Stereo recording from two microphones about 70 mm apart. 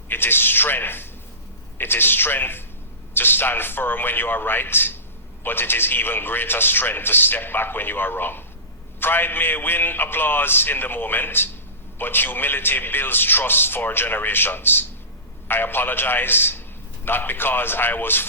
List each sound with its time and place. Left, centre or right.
0.1 s a man's voice: left